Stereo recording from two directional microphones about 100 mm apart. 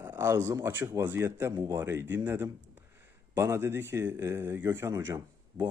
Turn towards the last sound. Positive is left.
turn(degrees=-25)  # may be behind; listen again after turning